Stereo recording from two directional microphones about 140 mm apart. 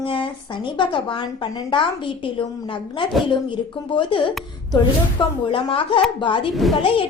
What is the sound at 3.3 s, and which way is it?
A woman's voice, 35° left (ahead or behind).